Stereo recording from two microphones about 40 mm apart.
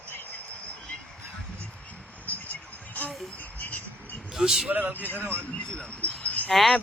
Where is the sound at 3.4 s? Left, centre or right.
Left.